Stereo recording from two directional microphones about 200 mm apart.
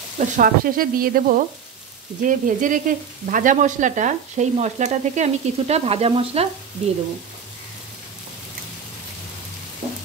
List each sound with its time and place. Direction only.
0.2 s sizzle: 45° right (ahead or behind)
2.2 s frying: 40° right (ahead or behind)